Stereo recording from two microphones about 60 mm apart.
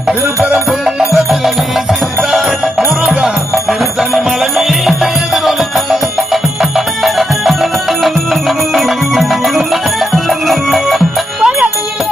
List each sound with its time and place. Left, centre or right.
0.4 s music: right
1.1 s music: centre
3.5 s music: centre